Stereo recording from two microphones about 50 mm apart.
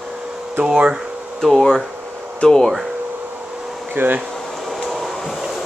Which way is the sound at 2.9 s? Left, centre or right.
Right.